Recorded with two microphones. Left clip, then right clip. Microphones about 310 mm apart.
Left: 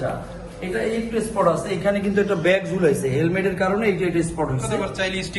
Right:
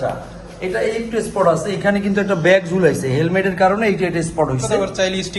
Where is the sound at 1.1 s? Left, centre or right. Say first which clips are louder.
Right 4 dB; right.